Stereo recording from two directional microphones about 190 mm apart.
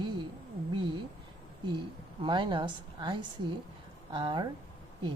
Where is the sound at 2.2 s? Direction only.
25° right (ahead or behind).